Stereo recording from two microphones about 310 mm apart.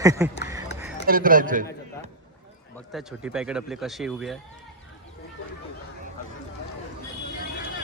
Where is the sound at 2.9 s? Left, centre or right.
Centre.